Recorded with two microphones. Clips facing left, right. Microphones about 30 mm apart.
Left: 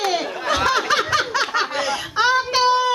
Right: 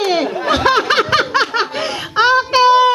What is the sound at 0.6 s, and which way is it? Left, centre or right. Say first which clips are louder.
Snicker: right 5 dB; right.